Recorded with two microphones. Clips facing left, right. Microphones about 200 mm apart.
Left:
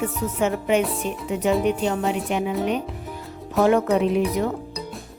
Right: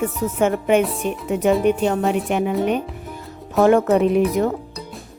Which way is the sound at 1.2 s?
55° right (ahead or behind).